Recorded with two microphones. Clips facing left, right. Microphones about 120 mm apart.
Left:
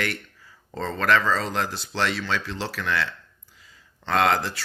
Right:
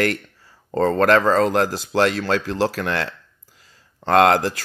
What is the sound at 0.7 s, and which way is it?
Speech, 55° right (ahead or behind).